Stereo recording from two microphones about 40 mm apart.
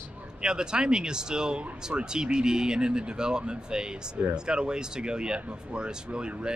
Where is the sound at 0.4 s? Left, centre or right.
Centre.